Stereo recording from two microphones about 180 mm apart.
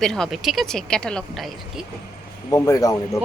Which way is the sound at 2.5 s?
20° left (ahead or behind).